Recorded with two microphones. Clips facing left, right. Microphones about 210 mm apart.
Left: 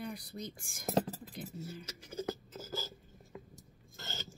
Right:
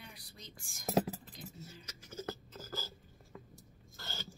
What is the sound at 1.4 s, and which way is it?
Speech, 60° left (ahead or behind).